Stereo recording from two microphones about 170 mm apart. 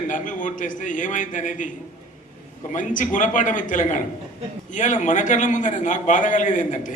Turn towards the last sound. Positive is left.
turn(degrees=45)  # may be behind; listen again after turning